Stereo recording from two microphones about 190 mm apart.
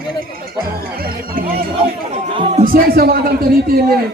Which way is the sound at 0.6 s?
50° right (ahead or behind).